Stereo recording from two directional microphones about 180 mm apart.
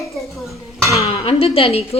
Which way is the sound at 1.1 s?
30° left (ahead or behind).